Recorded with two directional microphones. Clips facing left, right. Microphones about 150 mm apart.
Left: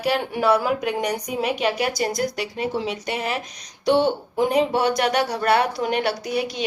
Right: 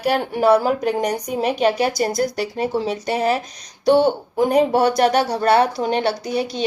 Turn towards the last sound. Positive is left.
turn(degrees=-30)  # may be behind; listen again after turning